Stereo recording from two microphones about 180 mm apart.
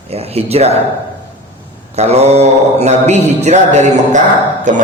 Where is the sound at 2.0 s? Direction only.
35° right (ahead or behind).